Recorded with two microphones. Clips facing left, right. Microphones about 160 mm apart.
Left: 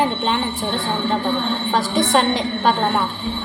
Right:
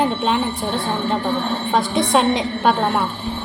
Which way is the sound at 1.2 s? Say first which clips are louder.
Even; 40° right (ahead or behind).